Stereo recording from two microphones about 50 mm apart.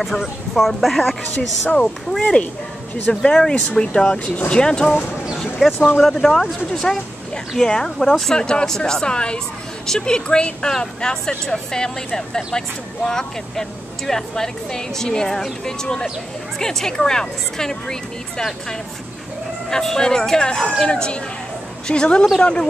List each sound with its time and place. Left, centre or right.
0.1 s speech: centre
1.3 s speech: left
5.6 s speech: centre
5.9 s speech: centre
19.7 s speech: centre